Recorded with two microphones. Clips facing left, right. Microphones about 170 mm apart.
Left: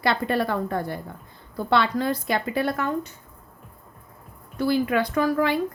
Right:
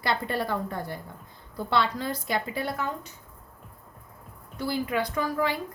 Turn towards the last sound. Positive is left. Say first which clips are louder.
# left 5 dB
turn(degrees=65)  # may be behind; listen again after turning